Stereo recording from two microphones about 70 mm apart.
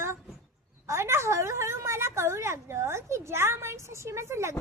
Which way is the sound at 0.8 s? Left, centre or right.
Right.